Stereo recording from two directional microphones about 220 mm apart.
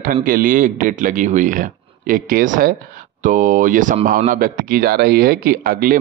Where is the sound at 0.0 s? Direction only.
40° right (ahead or behind).